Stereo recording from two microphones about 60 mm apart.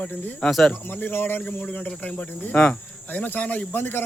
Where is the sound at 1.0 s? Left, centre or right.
Left.